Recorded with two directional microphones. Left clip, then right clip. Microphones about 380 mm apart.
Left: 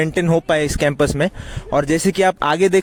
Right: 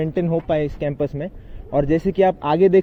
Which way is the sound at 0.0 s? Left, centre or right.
Left.